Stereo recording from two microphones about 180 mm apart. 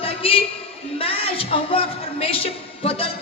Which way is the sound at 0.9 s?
30° left (ahead or behind).